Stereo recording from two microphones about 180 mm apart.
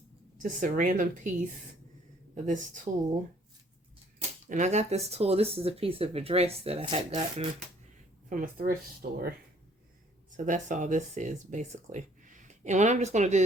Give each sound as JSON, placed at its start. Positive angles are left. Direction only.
{"t": 0.4, "sound": "speech", "side_deg": -50}
{"t": 2.3, "sound": "speech", "side_deg": -45}
{"t": 4.4, "sound": "speech", "side_deg": -40}
{"t": 8.3, "sound": "speech", "side_deg": -50}
{"t": 10.3, "sound": "speech", "side_deg": -45}